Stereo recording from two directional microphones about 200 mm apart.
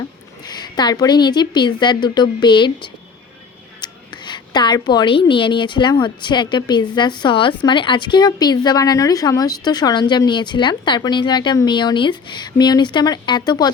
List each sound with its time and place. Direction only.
0.4 s a woman's voice: 20° left (ahead or behind)
4.3 s a woman's voice: 20° left (ahead or behind)